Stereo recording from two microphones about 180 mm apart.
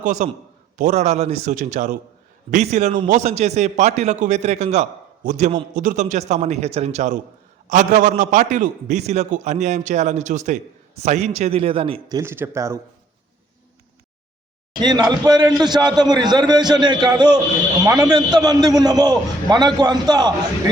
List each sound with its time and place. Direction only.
0.0 s a man's voice: 45° right (ahead or behind); by 12.8 s 15° right (ahead or behind)
14.8 s a man's voice: 25° right (ahead or behind)